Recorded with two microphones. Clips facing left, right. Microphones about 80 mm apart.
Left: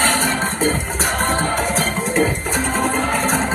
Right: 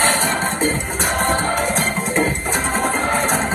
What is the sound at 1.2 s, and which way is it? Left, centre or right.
Music, right.